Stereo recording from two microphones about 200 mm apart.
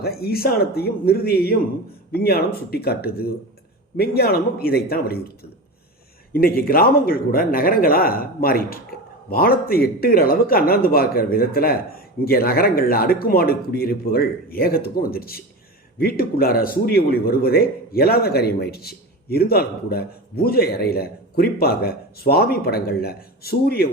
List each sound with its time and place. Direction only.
0.0 s speech: 50° left (ahead or behind)
6.3 s speech: 50° left (ahead or behind)